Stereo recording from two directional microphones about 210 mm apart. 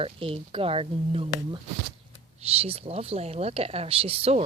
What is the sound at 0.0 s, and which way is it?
Speech, 25° right (ahead or behind).